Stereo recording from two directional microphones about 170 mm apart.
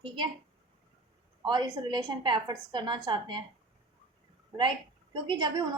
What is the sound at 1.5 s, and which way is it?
A woman's voice, 25° right (ahead or behind).